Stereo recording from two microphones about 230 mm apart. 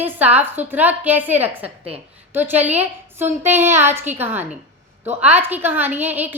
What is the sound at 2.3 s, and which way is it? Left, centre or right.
A woman's voice, centre.